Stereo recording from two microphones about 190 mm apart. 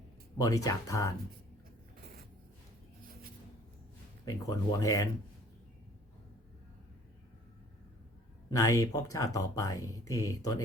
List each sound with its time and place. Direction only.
0.3 s speech: 20° left (ahead or behind)
4.3 s speech: 20° left (ahead or behind)
8.4 s speech: 15° left (ahead or behind)